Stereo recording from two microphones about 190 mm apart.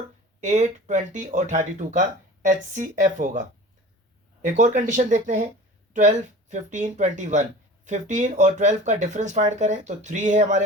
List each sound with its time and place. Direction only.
0.4 s speech: 40° right (ahead or behind)
4.4 s speech: 40° right (ahead or behind)